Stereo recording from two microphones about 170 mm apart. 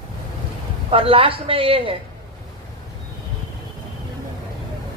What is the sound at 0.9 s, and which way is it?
Speech, 35° right (ahead or behind).